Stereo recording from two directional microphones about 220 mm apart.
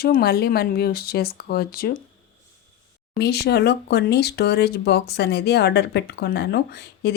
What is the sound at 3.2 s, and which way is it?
Speech, 50° left (ahead or behind).